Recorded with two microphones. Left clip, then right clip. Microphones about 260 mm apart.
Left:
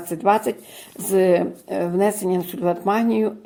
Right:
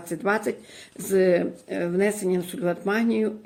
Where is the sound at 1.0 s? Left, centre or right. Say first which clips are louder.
Left 3 dB; centre.